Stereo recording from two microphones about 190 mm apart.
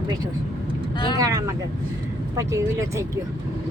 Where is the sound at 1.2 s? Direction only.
20° right (ahead or behind).